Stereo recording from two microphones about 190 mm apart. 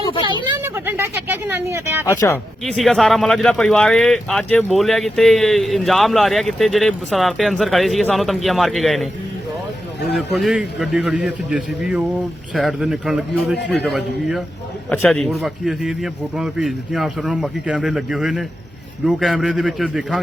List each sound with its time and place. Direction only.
0.6 s speech: 10° right (ahead or behind)
2.0 s speech: 15° left (ahead or behind)
2.6 s speech: centre (ahead or behind)
10.1 s speech: centre (ahead or behind)